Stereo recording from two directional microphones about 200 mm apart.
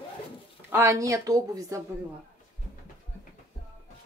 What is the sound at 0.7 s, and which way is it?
A woman's voice, 10° right (ahead or behind).